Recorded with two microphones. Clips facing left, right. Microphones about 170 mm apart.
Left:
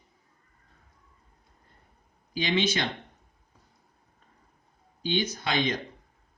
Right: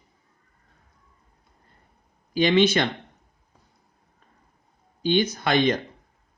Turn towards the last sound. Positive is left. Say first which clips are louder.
# right 7 dB
turn(degrees=-60)  # may be behind; listen again after turning